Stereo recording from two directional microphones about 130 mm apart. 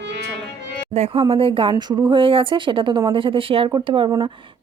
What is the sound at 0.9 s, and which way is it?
Speech, 55° right (ahead or behind).